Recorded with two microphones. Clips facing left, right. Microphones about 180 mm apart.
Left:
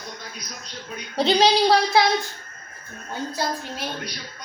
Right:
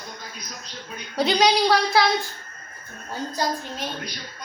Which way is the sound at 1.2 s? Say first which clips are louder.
Left 1 dB; 30° left (ahead or behind).